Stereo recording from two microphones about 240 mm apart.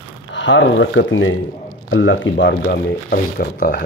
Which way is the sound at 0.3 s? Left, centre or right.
Left.